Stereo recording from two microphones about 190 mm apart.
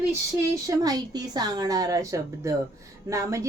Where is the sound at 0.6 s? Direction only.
20° right (ahead or behind).